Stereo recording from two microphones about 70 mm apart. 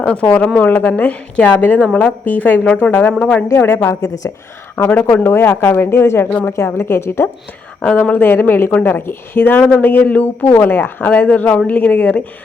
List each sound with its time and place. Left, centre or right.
0.0 s a woman's voice: centre
3.5 s speech: left
4.8 s a woman's voice: left
7.9 s a woman's voice: left